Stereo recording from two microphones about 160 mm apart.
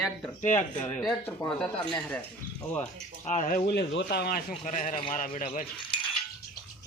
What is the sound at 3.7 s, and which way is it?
Speech, 90° left.